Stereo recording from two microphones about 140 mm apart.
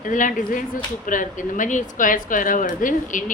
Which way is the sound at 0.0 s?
70° left (ahead or behind).